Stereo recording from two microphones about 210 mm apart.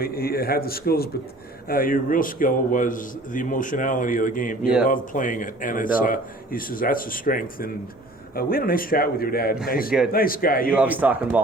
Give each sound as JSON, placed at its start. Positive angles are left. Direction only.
{"t": 0.0, "sound": "a man's voice", "side_deg": 45}
{"t": 10.8, "sound": "a man's voice", "side_deg": -5}